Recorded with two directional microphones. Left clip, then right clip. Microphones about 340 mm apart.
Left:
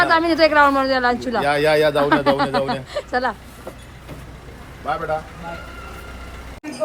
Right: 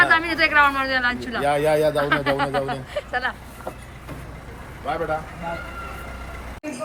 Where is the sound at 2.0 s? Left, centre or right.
Centre.